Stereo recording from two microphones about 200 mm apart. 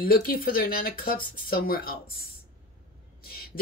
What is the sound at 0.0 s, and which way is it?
Speech, 45° left (ahead or behind).